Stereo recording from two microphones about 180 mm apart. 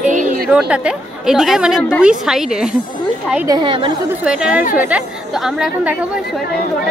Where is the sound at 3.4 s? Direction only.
25° right (ahead or behind).